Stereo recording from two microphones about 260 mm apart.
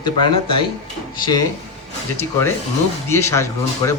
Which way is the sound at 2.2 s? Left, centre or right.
Centre.